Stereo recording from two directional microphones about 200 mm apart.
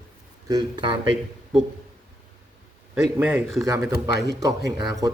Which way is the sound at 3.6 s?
15° right (ahead or behind).